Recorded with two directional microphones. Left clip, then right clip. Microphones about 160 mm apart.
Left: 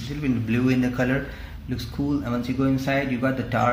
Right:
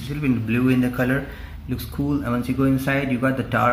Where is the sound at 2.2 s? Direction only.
25° right (ahead or behind).